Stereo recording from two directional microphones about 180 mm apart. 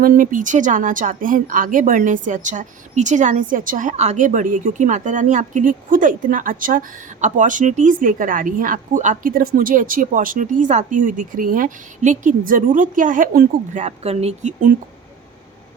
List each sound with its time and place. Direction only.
0.0 s a woman's voice: 50° right (ahead or behind)